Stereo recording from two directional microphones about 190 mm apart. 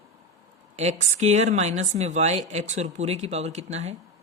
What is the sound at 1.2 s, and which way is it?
Speech, 35° right (ahead or behind).